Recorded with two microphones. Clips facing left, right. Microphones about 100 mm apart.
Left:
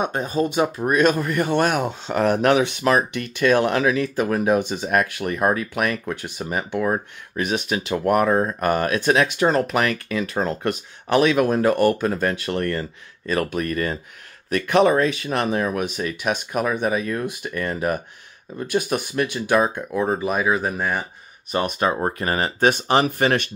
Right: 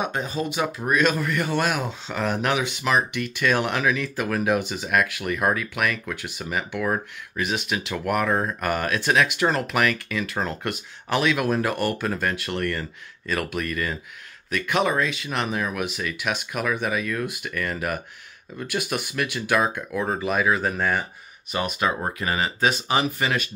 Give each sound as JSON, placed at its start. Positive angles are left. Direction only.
{"t": 0.0, "sound": "speech", "side_deg": 45}
{"t": 2.4, "sound": "speech", "side_deg": 35}
{"t": 8.3, "sound": "speech", "side_deg": 25}
{"t": 8.5, "sound": "speech", "side_deg": 35}
{"t": 21.5, "sound": "speech", "side_deg": 40}